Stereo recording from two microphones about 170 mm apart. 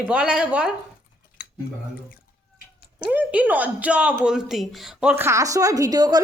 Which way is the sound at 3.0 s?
10° right (ahead or behind).